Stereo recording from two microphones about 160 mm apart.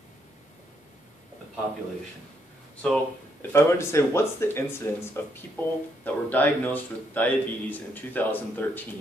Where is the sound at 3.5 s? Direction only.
15° left (ahead or behind).